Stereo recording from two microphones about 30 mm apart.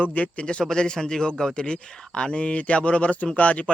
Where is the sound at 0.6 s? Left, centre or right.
Left.